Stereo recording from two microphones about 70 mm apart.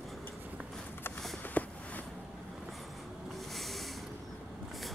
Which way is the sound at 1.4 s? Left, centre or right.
Left.